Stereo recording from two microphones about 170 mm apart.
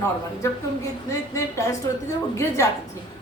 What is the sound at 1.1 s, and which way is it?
A woman's voice, 15° left (ahead or behind).